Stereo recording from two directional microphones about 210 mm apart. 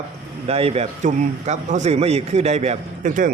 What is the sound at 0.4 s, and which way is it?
A man's voice, 30° right (ahead or behind).